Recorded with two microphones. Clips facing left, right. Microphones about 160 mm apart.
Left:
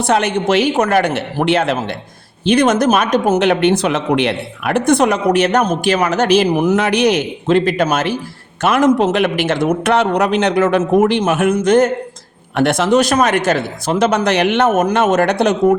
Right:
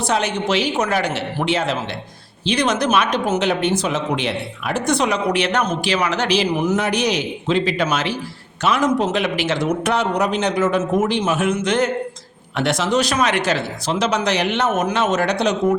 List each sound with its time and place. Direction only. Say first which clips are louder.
0.0 s a man's voice: left 5 dB; 55° left (ahead or behind)
4.9 s speech: left 6 dB; 50° left (ahead or behind)
6.7 s a man's voice: left 6 dB; 80° left; by 15.5 s 55° left (ahead or behind)